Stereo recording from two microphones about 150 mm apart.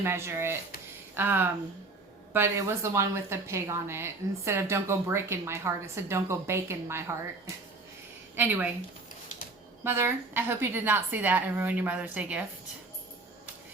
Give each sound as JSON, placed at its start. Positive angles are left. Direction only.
{"t": 0.0, "sound": "a woman's voice", "side_deg": -15}
{"t": 8.4, "sound": "a woman's voice", "side_deg": -10}
{"t": 9.8, "sound": "a woman's voice", "side_deg": -15}